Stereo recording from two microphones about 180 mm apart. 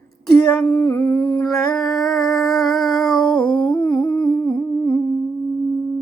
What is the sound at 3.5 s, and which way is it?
Humming, 25° left (ahead or behind).